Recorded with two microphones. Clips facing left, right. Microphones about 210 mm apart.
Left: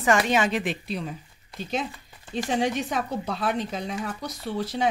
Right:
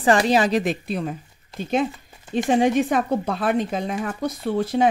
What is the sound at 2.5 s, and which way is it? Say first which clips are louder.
Speech: right 8 dB; 50° right (ahead or behind).